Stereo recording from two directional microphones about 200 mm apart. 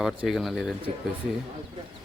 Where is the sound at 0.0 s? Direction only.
Centre (ahead or behind).